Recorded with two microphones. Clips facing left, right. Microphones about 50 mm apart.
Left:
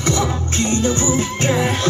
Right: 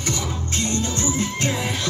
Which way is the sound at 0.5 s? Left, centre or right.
Left.